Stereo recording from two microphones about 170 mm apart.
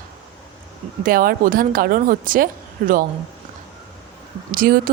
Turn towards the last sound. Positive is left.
turn(degrees=-55)  # may be behind; listen again after turning